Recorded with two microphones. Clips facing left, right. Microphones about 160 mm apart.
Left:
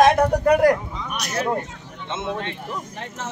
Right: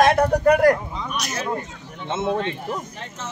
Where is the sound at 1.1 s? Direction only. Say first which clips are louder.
Left 3 dB; 60° left (ahead or behind).